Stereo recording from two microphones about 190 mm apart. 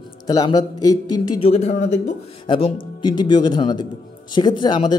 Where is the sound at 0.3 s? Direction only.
20° left (ahead or behind).